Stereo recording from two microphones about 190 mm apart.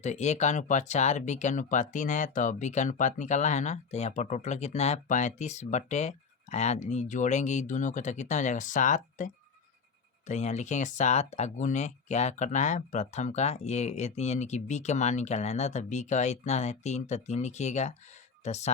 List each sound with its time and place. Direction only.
0.0 s speech: 35° left (ahead or behind)